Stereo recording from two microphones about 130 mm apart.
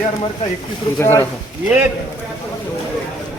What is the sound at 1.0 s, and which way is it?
Cough, 20° left (ahead or behind).